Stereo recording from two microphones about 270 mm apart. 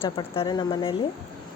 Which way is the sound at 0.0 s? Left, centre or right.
Centre.